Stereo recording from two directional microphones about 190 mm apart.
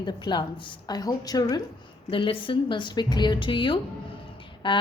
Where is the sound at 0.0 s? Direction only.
25° left (ahead or behind).